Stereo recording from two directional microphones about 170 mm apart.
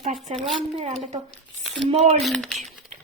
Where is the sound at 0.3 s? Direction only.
40° right (ahead or behind).